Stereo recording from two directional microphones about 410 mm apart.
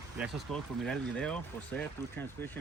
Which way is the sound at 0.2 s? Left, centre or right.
Centre.